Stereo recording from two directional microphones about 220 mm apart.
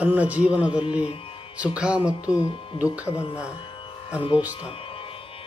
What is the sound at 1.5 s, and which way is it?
Music, 5° right (ahead or behind).